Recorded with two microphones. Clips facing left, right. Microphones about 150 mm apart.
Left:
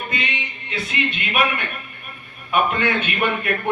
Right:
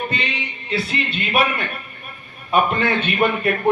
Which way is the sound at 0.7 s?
35° right (ahead or behind).